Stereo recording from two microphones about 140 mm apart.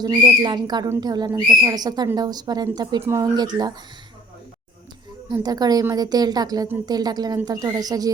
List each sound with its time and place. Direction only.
0.2 s whistling: 30° right (ahead or behind)
1.0 s speech: 30° right (ahead or behind)
5.3 s speech: 30° right (ahead or behind)